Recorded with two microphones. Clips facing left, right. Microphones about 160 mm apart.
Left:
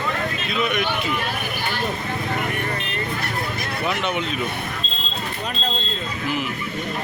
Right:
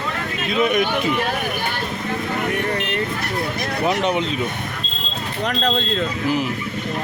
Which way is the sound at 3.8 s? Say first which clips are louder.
Right 5 dB; 35° right (ahead or behind).